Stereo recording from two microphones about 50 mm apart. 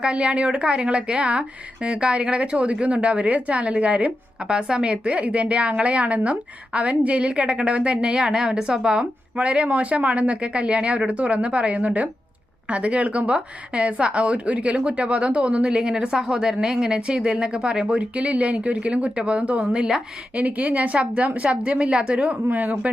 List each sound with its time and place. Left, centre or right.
0.0 s a woman's voice: right
22.4 s speech: right